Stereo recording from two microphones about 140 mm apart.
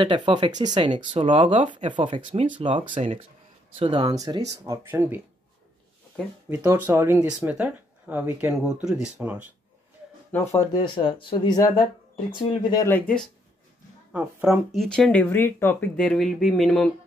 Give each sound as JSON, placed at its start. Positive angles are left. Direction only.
{"t": 0.0, "sound": "speech", "side_deg": -35}
{"t": 4.0, "sound": "speech", "side_deg": -25}
{"t": 6.5, "sound": "speech", "side_deg": -20}
{"t": 10.3, "sound": "speech", "side_deg": 20}
{"t": 12.8, "sound": "speech", "side_deg": 10}
{"t": 14.1, "sound": "speech", "side_deg": -10}
{"t": 14.7, "sound": "speech", "side_deg": 5}